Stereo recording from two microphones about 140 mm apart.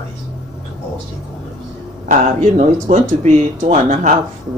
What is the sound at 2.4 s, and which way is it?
Speech, 60° right (ahead or behind).